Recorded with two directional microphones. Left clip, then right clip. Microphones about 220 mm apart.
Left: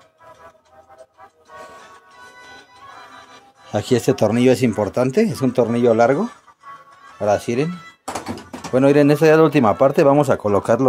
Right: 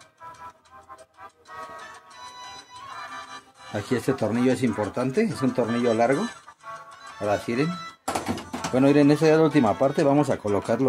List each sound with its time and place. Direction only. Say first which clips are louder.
3.7 s speech: left 8 dB; 35° left (ahead or behind)
8.7 s speech: left 6 dB; 25° left (ahead or behind)